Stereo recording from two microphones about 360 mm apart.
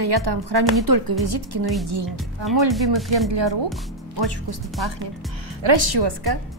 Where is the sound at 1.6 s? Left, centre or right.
Centre.